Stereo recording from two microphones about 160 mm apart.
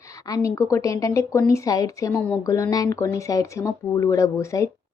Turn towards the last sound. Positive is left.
turn(degrees=20)  # may be behind; listen again after turning